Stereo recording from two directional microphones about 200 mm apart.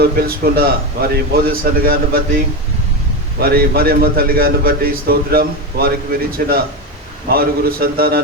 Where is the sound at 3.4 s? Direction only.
50° right (ahead or behind).